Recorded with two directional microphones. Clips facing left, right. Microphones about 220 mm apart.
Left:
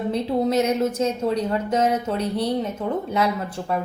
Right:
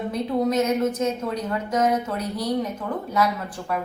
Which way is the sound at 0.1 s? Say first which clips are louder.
Left 1 dB; 30° left (ahead or behind).